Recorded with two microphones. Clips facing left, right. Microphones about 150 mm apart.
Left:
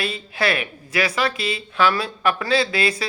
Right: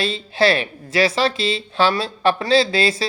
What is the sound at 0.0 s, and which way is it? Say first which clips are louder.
Speech: right 5 dB; 30° right (ahead or behind).